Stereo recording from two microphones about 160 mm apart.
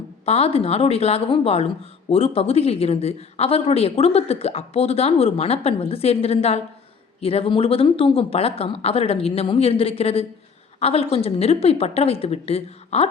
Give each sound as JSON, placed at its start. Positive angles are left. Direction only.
{"t": 0.3, "sound": "a woman's voice", "side_deg": 40}